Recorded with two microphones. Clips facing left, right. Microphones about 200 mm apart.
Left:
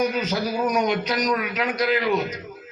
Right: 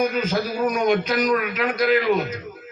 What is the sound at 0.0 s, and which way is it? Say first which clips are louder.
A man's voice: right 1 dB; 50° right (ahead or behind).